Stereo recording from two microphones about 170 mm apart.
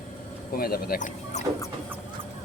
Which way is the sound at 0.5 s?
60° left (ahead or behind).